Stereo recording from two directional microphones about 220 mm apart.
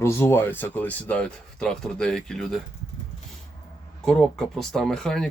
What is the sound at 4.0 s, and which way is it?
Speech, centre (ahead or behind).